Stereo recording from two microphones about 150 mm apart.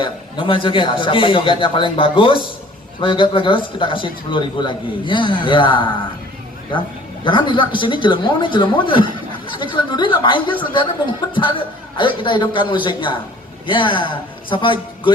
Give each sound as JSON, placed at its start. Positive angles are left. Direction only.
{"t": 0.0, "sound": "a man's voice", "side_deg": 35}
{"t": 7.3, "sound": "a man's voice", "side_deg": 30}